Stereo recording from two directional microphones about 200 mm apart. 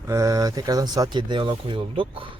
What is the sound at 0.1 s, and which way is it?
Speech, 15° right (ahead or behind).